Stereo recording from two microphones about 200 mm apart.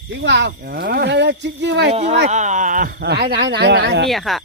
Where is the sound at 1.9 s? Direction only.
35° right (ahead or behind); by 4.1 s 55° right (ahead or behind).